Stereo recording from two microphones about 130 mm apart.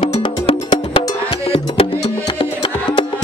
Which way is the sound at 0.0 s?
45° left (ahead or behind).